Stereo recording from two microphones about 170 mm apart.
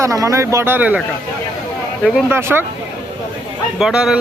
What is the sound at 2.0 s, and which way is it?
Speech, 10° right (ahead or behind).